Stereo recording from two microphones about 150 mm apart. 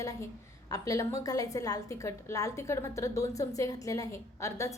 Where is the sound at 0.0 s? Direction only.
20° left (ahead or behind).